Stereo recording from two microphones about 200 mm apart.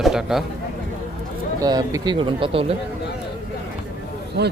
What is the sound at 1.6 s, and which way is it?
Speech, 20° right (ahead or behind).